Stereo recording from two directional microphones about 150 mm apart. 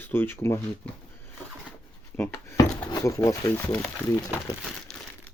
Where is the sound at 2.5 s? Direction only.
25° left (ahead or behind).